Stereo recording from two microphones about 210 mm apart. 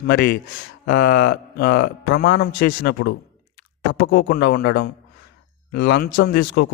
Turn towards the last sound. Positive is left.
turn(degrees=50)  # may be behind; listen again after turning